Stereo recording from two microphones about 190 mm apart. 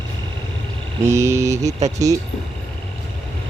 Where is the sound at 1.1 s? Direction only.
15° right (ahead or behind).